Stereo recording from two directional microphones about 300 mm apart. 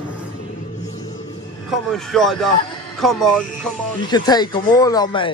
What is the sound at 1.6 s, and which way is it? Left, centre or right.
Speech, centre.